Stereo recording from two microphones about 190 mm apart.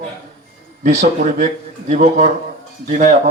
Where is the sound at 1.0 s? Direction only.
40° right (ahead or behind).